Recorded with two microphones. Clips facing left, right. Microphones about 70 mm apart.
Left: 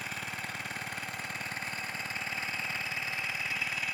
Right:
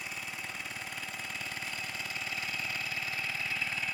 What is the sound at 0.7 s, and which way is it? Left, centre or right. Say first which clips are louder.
Engine: left 2 dB; left.